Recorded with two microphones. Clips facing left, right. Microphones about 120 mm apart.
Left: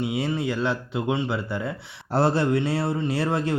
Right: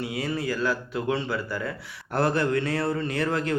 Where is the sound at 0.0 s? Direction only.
25° left (ahead or behind).